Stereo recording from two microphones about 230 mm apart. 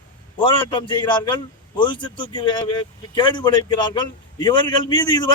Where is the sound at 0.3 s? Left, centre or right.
Left.